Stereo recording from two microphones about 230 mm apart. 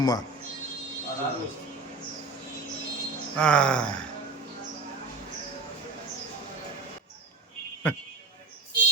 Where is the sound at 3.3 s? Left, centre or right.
Centre.